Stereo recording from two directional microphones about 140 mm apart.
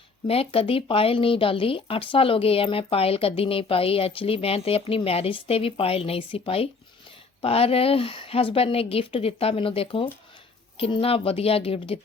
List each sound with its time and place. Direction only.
0.3 s a woman's voice: 45° left (ahead or behind)